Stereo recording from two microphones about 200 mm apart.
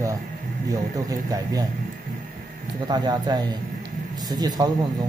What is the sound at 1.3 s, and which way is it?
Speech, 20° right (ahead or behind).